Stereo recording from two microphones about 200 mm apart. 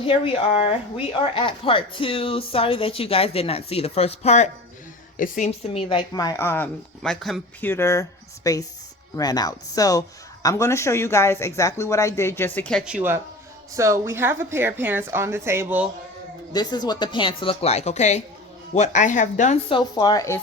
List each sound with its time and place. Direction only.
0.6 s a woman's voice: 30° left (ahead or behind); by 7.7 s centre (ahead or behind)
7.7 s a woman's voice: 15° left (ahead or behind); by 15.9 s 10° right (ahead or behind)
16.5 s a woman's voice: 20° left (ahead or behind); by 19.7 s 35° left (ahead or behind)
19.7 s a woman's voice: 20° left (ahead or behind)